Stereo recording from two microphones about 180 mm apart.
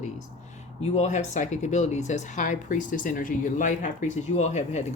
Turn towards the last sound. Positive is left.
turn(degrees=40)  # may be behind; listen again after turning